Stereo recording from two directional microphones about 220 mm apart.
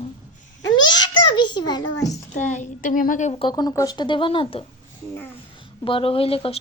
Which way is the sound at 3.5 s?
15° left (ahead or behind).